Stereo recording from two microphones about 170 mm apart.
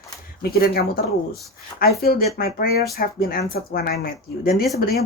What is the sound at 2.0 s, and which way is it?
Speech, 60° left (ahead or behind).